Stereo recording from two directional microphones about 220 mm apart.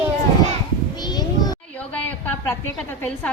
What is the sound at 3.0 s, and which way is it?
Speech, 5° left (ahead or behind).